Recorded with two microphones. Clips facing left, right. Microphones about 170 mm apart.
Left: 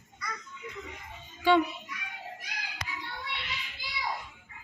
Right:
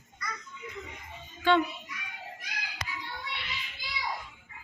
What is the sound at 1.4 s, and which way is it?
Music, 10° left (ahead or behind).